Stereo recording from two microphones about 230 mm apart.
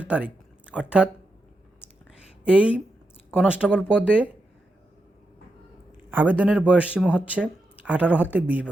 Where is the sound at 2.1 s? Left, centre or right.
Centre.